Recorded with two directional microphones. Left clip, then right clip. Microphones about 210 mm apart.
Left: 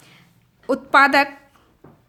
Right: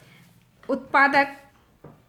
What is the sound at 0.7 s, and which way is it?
Speech, 45° left (ahead or behind).